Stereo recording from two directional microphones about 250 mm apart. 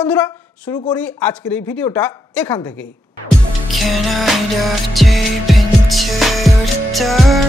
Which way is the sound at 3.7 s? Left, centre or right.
Centre.